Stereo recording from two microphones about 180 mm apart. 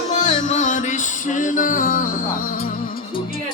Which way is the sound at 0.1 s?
45° left (ahead or behind).